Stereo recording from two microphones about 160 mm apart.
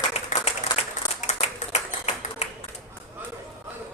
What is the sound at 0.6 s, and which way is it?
Applause, 45° left (ahead or behind).